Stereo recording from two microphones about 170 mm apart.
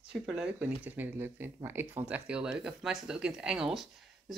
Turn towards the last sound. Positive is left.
turn(degrees=0)  # may be behind; listen again after turning